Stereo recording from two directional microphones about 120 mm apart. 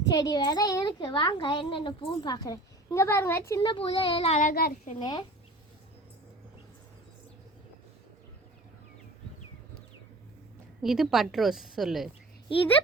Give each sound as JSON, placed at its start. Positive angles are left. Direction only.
{"t": 0.1, "sound": "a child's voice", "side_deg": 35}
{"t": 3.6, "sound": "speech", "side_deg": 45}
{"t": 4.4, "sound": "a child's voice", "side_deg": 90}
{"t": 4.9, "sound": "a child's voice", "side_deg": 35}
{"t": 10.8, "sound": "a woman's voice", "side_deg": -5}